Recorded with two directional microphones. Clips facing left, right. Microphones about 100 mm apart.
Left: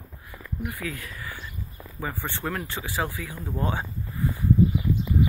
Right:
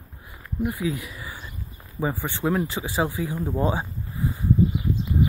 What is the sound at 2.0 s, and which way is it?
Speech, 25° right (ahead or behind).